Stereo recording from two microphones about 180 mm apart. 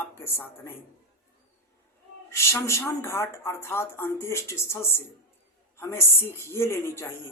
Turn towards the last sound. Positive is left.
turn(degrees=15)  # may be behind; listen again after turning